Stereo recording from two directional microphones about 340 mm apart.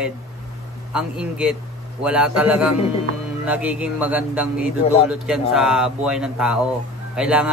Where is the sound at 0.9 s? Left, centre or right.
Centre.